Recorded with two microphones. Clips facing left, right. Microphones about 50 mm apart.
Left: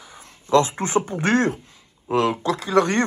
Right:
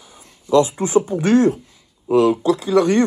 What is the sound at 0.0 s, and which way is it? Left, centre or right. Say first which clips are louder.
Speech: even; left.